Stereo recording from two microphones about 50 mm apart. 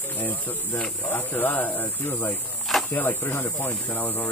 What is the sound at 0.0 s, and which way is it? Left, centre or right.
Speech, left.